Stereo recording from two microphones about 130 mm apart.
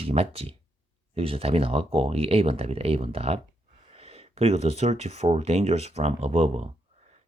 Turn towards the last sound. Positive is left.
turn(degrees=-55)  # may be behind; listen again after turning